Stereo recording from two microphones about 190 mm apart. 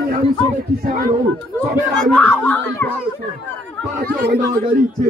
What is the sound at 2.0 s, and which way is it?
Speech, centre (ahead or behind).